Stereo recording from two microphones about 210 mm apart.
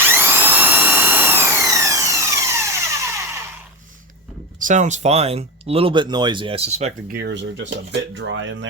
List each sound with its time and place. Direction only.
0.0 s a sound: 10° right (ahead or behind)
4.6 s speech: 35° right (ahead or behind)
7.1 s speech: 50° right (ahead or behind)